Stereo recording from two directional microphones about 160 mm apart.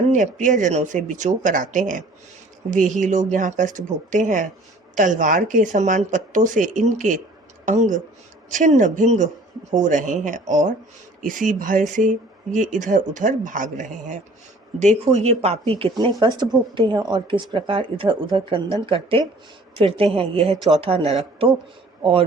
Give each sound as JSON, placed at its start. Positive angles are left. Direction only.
{"t": 0.1, "sound": "speech", "side_deg": -50}